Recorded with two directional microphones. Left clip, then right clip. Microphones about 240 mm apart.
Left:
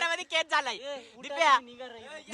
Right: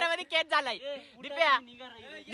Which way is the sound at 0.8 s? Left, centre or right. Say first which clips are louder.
Left 1 dB; left.